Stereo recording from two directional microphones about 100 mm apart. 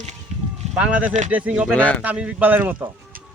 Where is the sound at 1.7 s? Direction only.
15° left (ahead or behind).